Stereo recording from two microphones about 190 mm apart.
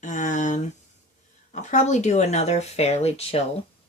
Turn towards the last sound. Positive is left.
turn(degrees=35)  # may be behind; listen again after turning